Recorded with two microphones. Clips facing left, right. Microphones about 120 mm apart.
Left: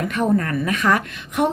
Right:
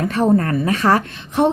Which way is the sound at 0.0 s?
30° right (ahead or behind).